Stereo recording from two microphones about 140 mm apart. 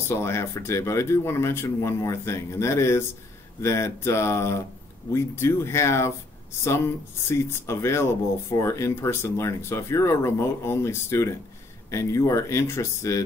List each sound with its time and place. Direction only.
0.1 s speech: 20° left (ahead or behind)
7.2 s speech: 20° left (ahead or behind)